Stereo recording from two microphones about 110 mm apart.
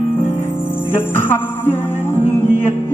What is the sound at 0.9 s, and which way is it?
Music, 20° left (ahead or behind).